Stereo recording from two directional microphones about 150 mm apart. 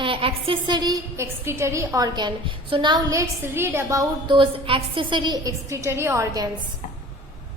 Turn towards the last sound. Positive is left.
turn(degrees=-20)  # may be behind; listen again after turning